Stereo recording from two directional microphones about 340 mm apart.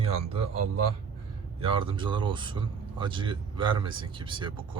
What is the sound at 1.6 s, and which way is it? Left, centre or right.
Speech, centre.